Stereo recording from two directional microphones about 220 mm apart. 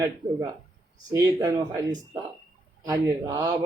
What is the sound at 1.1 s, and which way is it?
Speech, 15° right (ahead or behind).